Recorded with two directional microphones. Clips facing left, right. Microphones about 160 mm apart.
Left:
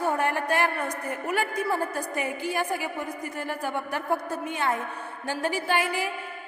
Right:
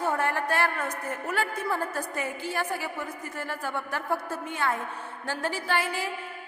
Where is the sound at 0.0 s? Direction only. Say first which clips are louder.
Left 1 dB; 15° left (ahead or behind).